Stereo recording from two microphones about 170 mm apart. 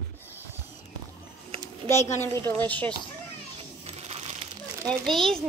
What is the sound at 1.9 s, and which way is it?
Speech, 15° left (ahead or behind).